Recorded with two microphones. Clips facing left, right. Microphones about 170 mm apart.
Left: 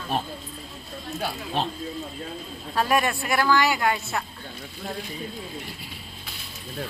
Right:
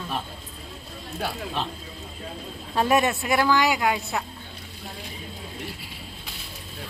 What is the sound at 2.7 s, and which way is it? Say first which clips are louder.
A woman's voice: right 2 dB; 25° right (ahead or behind).